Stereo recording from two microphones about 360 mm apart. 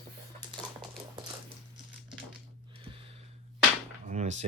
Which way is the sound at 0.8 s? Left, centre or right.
Centre.